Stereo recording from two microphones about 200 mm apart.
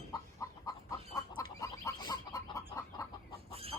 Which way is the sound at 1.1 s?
15° left (ahead or behind).